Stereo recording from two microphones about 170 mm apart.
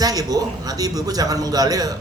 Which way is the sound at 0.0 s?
20° right (ahead or behind).